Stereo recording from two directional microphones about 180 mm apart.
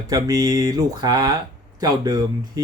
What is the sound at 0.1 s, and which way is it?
Speech, 20° right (ahead or behind).